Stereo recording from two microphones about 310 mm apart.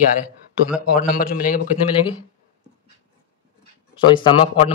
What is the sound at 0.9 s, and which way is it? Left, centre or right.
Speech, left.